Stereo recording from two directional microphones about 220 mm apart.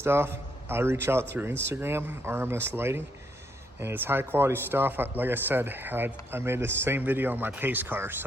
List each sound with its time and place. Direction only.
0.0 s a man's voice: 10° right (ahead or behind)